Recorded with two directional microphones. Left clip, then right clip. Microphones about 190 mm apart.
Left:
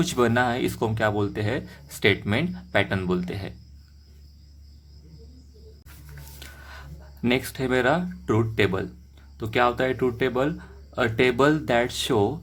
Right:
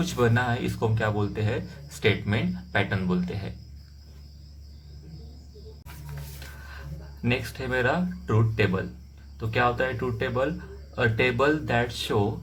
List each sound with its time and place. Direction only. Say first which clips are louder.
0.0 s speech: left 3 dB; 50° left (ahead or behind)
7.2 s speech: left 4 dB; 50° left (ahead or behind)